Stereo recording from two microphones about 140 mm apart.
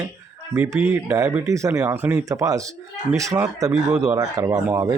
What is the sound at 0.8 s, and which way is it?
Speech, 10° right (ahead or behind).